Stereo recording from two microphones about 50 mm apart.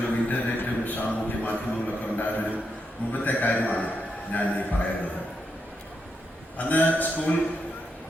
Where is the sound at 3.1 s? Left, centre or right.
Left.